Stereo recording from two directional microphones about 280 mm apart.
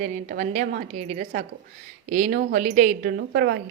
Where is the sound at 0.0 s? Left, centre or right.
Right.